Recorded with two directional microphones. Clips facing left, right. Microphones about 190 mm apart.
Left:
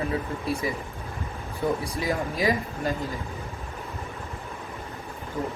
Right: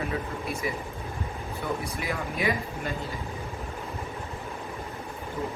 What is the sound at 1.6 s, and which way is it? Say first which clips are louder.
Speech: left 6 dB; 35° left (ahead or behind).